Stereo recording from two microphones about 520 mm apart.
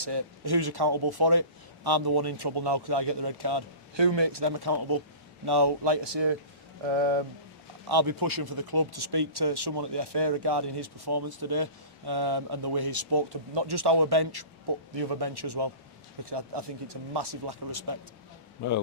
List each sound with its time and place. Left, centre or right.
0.0 s speech: right
7.9 s speech: right